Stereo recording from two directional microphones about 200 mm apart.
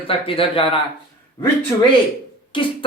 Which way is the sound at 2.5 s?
25° left (ahead or behind).